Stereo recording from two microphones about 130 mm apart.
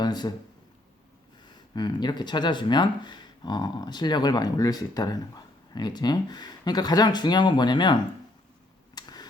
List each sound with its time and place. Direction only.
0.0 s speech: 30° left (ahead or behind)
1.5 s speech: 35° left (ahead or behind)
9.0 s a sound: 30° left (ahead or behind)